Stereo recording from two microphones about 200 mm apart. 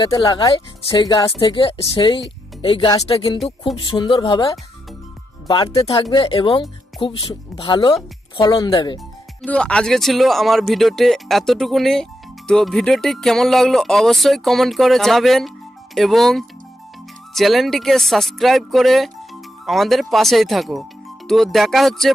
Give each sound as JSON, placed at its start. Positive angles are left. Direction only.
{"t": 0.0, "sound": "speech", "side_deg": 20}
{"t": 9.4, "sound": "speech", "side_deg": 5}